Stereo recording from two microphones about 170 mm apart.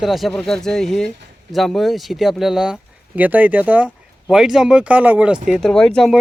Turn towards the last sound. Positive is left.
turn(degrees=0)  # may be behind; listen again after turning